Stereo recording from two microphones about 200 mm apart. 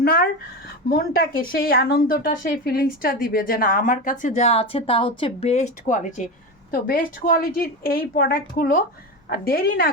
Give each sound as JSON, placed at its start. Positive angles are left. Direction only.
{"t": 0.0, "sound": "a woman's voice", "side_deg": 50}